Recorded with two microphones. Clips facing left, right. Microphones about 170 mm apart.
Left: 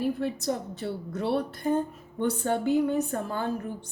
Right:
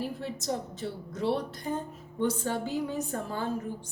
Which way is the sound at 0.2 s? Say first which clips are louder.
Left 4 dB; 60° left (ahead or behind).